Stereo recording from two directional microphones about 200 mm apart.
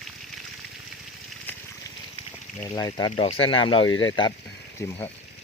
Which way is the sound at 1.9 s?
20° left (ahead or behind).